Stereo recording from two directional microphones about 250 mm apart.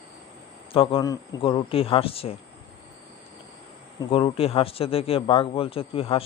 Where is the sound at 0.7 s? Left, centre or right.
Left.